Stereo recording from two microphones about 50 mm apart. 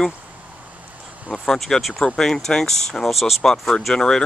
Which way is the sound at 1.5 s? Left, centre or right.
Centre.